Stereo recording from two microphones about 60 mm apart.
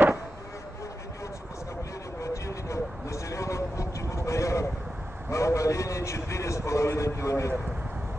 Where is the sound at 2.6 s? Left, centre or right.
Left.